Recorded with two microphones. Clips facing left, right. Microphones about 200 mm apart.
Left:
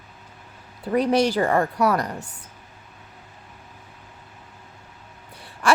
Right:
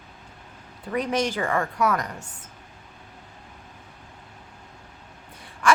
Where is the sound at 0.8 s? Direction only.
35° left (ahead or behind).